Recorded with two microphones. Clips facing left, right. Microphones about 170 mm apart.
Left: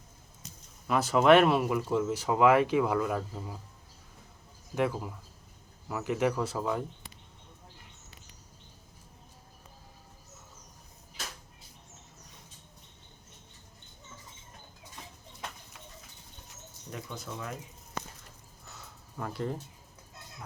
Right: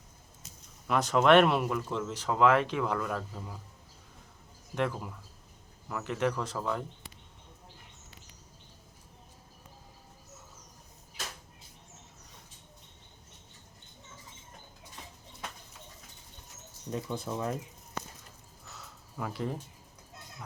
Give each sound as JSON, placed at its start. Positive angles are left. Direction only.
{"t": 0.9, "sound": "speech", "side_deg": 5}
{"t": 4.7, "sound": "speech", "side_deg": 10}
{"t": 17.3, "sound": "speech", "side_deg": -25}
{"t": 18.7, "sound": "a sound", "side_deg": 0}